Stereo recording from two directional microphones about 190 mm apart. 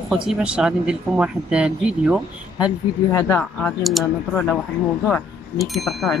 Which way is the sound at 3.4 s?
5° left (ahead or behind).